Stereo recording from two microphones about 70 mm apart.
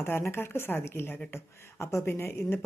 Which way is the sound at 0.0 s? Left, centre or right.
Left.